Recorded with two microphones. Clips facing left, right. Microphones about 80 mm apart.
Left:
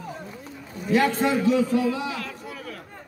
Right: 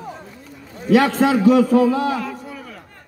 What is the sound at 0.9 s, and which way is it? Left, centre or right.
Speech, right.